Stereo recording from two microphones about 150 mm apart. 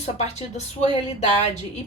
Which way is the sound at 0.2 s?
50° left (ahead or behind).